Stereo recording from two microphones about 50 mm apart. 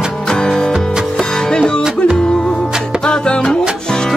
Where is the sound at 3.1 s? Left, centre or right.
Centre.